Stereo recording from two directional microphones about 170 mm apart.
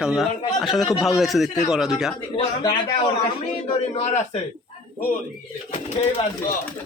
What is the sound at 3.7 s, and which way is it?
Speech, 35° left (ahead or behind).